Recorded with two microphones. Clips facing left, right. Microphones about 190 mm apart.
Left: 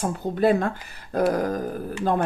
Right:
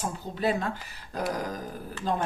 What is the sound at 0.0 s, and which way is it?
A woman's voice, 55° left (ahead or behind).